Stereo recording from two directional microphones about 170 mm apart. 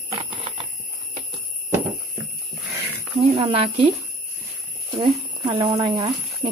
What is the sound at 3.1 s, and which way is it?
Speech, 35° right (ahead or behind).